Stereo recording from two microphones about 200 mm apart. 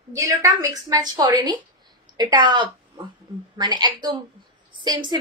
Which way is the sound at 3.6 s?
20° right (ahead or behind).